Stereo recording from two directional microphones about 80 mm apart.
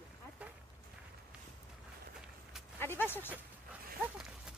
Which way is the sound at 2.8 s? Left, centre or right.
Left.